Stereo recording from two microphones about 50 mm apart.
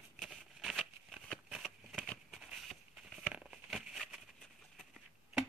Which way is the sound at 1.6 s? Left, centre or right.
Centre.